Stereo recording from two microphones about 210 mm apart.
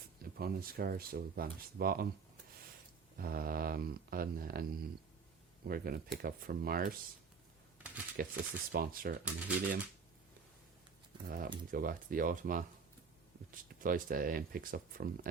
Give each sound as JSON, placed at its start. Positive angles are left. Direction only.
{"t": 0.2, "sound": "speech", "side_deg": -45}
{"t": 3.2, "sound": "speech", "side_deg": -45}
{"t": 8.2, "sound": "speech", "side_deg": -45}
{"t": 9.2, "sound": "speech", "side_deg": -5}
{"t": 11.3, "sound": "speech", "side_deg": -40}
{"t": 13.7, "sound": "speech", "side_deg": -40}